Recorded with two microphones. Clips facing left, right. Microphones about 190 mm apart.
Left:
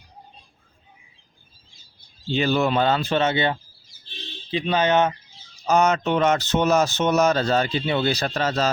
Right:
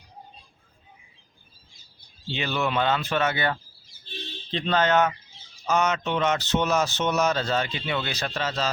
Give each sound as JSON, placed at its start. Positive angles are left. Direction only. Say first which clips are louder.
{"t": 2.3, "sound": "speech", "louder": "left 6 dB", "side_deg": 40}
{"t": 4.5, "sound": "speech", "louder": "left 2 dB", "side_deg": 10}
{"t": 5.6, "sound": "speech", "louder": "left 5 dB", "side_deg": 40}